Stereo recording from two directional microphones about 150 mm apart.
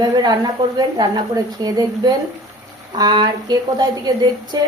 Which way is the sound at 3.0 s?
30° right (ahead or behind).